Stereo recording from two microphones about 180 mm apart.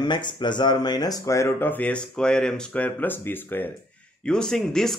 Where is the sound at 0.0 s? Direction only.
25° left (ahead or behind).